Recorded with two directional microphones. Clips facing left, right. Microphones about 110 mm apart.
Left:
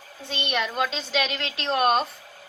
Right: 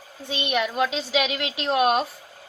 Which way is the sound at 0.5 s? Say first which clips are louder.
Right 3 dB; 5° right (ahead or behind).